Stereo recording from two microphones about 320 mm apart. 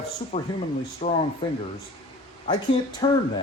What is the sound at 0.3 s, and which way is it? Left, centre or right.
Speech, left.